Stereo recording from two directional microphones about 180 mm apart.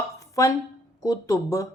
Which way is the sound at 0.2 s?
15° left (ahead or behind).